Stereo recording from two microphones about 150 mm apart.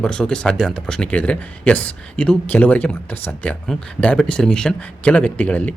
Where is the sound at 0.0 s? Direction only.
5° left (ahead or behind).